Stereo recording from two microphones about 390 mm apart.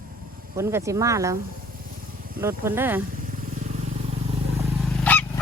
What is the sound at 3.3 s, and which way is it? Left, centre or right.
Vehicle, centre.